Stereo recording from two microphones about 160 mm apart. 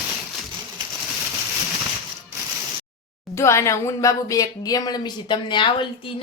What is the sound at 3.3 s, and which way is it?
Speech, 15° left (ahead or behind).